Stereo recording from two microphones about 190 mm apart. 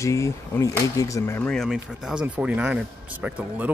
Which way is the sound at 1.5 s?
Centre (ahead or behind).